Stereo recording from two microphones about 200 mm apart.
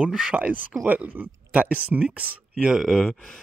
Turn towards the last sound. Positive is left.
turn(degrees=0)  # may be behind; listen again after turning